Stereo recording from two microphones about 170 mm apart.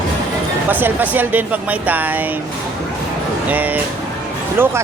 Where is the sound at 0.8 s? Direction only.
10° right (ahead or behind).